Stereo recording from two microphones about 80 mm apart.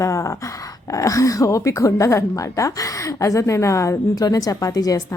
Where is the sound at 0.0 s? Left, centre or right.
Left.